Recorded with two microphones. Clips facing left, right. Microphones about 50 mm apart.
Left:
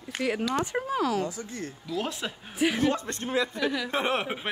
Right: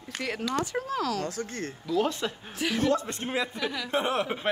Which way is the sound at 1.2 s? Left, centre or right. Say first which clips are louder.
Right 1 dB; right.